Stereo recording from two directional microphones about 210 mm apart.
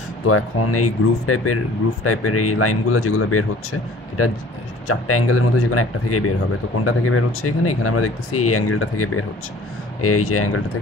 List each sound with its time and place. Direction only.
0.3 s speech: 90° left
4.8 s speech: 90° left